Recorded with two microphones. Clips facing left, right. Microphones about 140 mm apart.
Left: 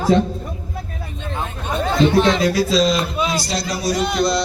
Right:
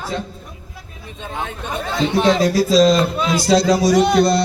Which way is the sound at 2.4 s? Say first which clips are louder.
Right 3 dB; 40° right (ahead or behind).